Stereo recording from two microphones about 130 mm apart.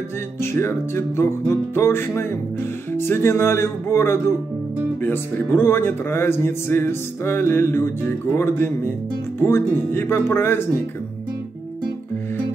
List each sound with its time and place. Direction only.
0.4 s music: 20° left (ahead or behind)
5.0 s speech: 15° left (ahead or behind)